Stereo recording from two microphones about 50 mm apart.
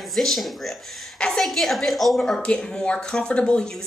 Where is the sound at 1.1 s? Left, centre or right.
Centre.